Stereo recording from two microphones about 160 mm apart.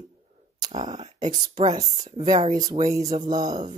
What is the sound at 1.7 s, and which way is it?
Speech, 25° right (ahead or behind).